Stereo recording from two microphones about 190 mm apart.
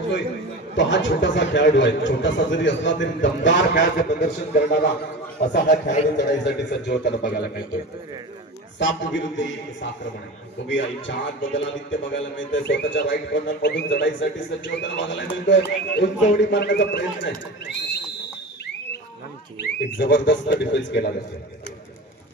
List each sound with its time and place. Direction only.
0.7 s a man's voice: 70° left (ahead or behind)
8.7 s a man's voice: 75° left (ahead or behind)
19.8 s a man's voice: 70° left (ahead or behind)